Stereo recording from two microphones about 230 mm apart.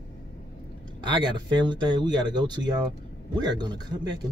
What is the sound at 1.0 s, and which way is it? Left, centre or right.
Speech, centre.